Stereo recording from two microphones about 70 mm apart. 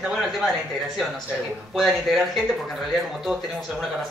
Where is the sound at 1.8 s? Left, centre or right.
Centre.